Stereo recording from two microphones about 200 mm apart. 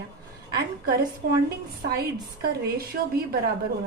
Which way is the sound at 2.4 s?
50° right (ahead or behind).